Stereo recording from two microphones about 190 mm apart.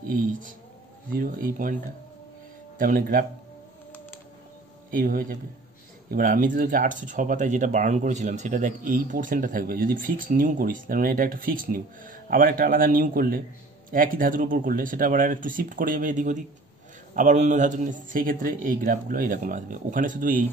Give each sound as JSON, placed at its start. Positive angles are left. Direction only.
{"t": 1.1, "sound": "speech", "side_deg": -50}
{"t": 2.8, "sound": "speech", "side_deg": -45}
{"t": 4.9, "sound": "speech", "side_deg": -45}